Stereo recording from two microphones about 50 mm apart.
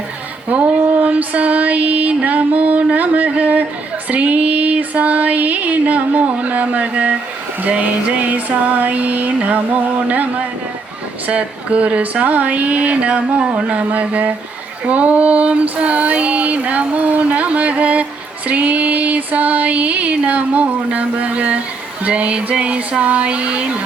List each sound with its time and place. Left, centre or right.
0.5 s female singing: right
4.1 s music: right
8.2 s music: right
11.3 s female singing: right
18.4 s a sound: right
22.0 s female singing: right